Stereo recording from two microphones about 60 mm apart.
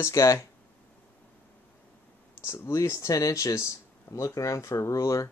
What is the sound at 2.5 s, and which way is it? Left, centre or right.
Speech, left.